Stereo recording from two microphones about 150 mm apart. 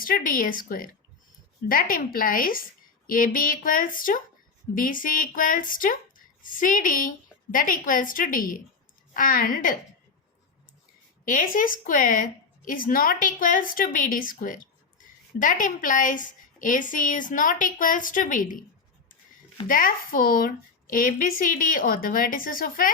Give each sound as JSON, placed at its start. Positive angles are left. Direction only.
{"t": 0.0, "sound": "a woman's voice", "side_deg": 65}
{"t": 11.3, "sound": "speech", "side_deg": 65}
{"t": 19.6, "sound": "a woman's voice", "side_deg": 70}